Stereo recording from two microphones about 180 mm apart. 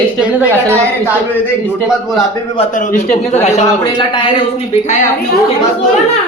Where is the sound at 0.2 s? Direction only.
10° right (ahead or behind).